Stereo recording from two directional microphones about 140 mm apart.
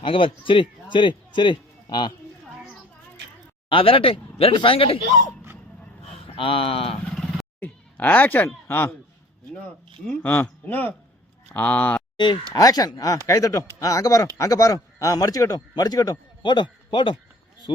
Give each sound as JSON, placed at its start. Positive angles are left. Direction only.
{"t": 0.0, "sound": "a man's voice", "side_deg": 40}
{"t": 3.7, "sound": "a man's voice", "side_deg": 40}
{"t": 6.2, "sound": "speech", "side_deg": 40}
{"t": 7.0, "sound": "vehicle", "side_deg": 5}
{"t": 7.6, "sound": "speech", "side_deg": 10}
{"t": 10.1, "sound": "speech", "side_deg": 10}
{"t": 12.1, "sound": "a man's voice", "side_deg": 35}